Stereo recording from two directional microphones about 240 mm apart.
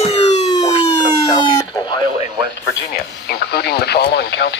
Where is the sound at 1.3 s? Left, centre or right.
Centre.